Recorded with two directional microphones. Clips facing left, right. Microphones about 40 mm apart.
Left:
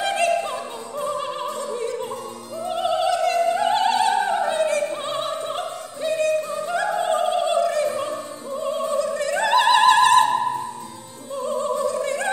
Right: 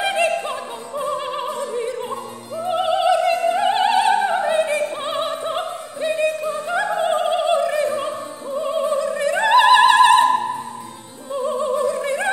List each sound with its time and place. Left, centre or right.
0.0 s music: right
0.5 s opera: right
11.3 s opera: right